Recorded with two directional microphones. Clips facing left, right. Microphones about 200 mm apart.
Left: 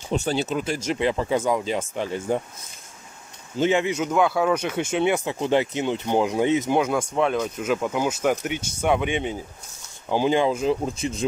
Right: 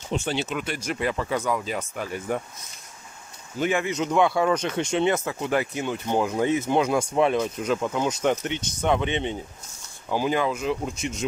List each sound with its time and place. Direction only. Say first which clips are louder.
0.1 s speech: left 3 dB; 40° left (ahead or behind)
3.5 s speech: left 4 dB; 25° left (ahead or behind)
3.9 s speech: even; 5° left (ahead or behind)
6.7 s speech: even; 5° left (ahead or behind)
10.0 s speech: left 4 dB; 25° left (ahead or behind)